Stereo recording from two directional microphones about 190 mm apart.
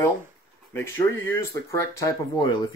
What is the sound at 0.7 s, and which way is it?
Speech, 10° left (ahead or behind).